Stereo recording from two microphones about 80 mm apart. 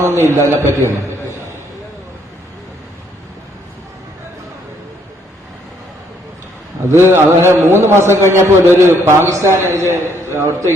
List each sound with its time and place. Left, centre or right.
0.0 s a man's voice: right
7.0 s a man's voice: right